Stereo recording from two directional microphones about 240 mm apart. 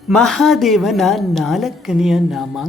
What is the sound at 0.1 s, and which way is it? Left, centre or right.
A woman's voice, centre.